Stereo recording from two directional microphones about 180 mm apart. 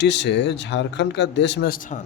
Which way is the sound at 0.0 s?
75° left (ahead or behind).